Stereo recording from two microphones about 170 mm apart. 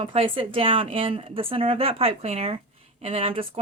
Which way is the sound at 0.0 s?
35° right (ahead or behind).